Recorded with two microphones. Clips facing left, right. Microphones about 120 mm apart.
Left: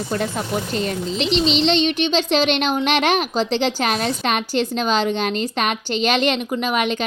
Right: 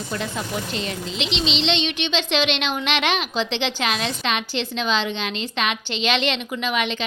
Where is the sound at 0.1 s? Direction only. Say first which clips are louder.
Left 4 dB; 45° left (ahead or behind).